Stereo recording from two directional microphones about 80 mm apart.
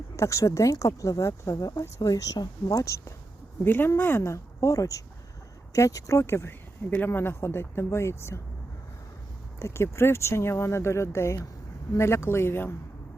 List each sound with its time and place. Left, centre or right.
0.2 s speech: left
3.6 s speech: left
9.6 s speech: left